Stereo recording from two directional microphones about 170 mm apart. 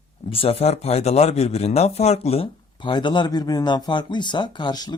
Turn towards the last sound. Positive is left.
turn(degrees=25)  # may be behind; listen again after turning